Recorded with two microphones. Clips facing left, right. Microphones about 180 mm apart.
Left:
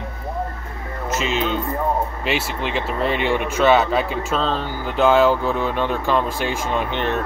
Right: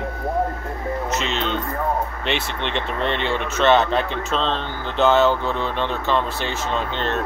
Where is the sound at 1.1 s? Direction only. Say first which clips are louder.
Left 7 dB; 5° left (ahead or behind).